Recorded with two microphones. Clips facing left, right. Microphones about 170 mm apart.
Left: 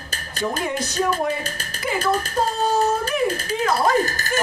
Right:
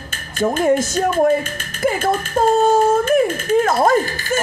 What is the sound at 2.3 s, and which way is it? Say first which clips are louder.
Speech: right 11 dB; 45° right (ahead or behind).